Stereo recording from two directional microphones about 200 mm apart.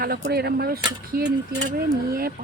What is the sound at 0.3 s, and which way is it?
Speech, 55° right (ahead or behind).